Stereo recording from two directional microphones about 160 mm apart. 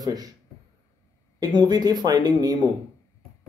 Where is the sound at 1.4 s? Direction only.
25° right (ahead or behind).